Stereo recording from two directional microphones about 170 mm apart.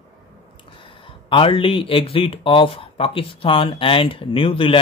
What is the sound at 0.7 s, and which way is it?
Speech, 30° left (ahead or behind).